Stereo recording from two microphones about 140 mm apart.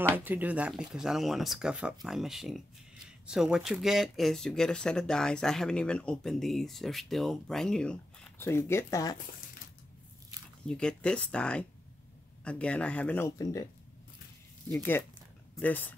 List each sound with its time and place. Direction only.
0.1 s speech: 10° right (ahead or behind); by 9.2 s 25° left (ahead or behind)
10.7 s speech: 5° left (ahead or behind)
13.4 s speech: 25° left (ahead or behind)
14.7 s speech: 15° left (ahead or behind)